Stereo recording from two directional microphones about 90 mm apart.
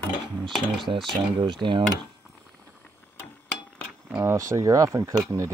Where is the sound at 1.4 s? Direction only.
60° right (ahead or behind).